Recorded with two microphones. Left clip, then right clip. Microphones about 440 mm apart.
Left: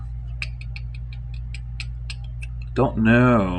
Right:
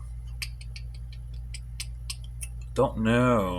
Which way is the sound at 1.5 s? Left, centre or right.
Right.